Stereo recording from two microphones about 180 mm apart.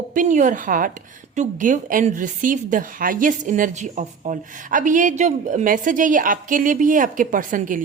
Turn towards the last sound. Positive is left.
turn(degrees=-45)  # may be behind; listen again after turning